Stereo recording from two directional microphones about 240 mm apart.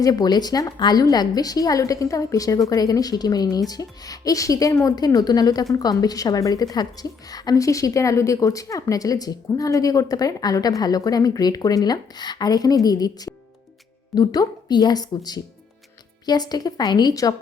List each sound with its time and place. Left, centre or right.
0.0 s a woman's voice: centre